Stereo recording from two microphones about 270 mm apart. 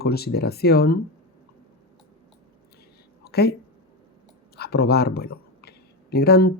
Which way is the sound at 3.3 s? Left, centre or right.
Left.